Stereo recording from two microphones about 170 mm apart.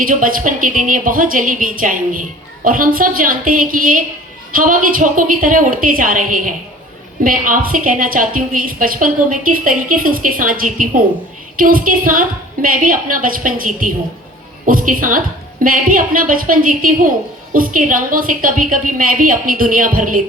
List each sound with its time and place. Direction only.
0.0 s a woman's voice: 55° right (ahead or behind)